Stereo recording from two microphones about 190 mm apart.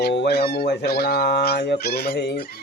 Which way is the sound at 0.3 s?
60° left (ahead or behind).